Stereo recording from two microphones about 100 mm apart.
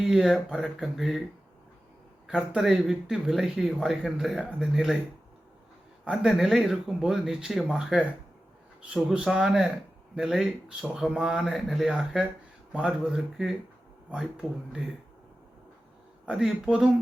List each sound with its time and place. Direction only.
0.0 s speech: 5° right (ahead or behind)
2.5 s speech: 5° right (ahead or behind)
6.1 s speech: 5° right (ahead or behind)
16.2 s speech: 10° right (ahead or behind)